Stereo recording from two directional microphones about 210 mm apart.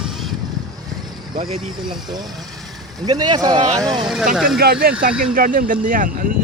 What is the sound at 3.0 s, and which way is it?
Speech, 20° right (ahead or behind).